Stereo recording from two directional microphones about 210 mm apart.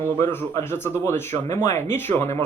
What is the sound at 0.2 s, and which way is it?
Speech, 10° left (ahead or behind).